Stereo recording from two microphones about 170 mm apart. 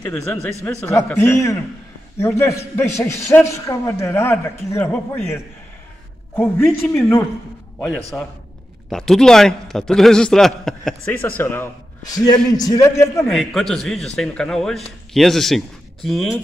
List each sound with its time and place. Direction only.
0.0 s a man's voice: 10° left (ahead or behind)
6.3 s a man's voice: 15° left (ahead or behind)
13.3 s a man's voice: centre (ahead or behind)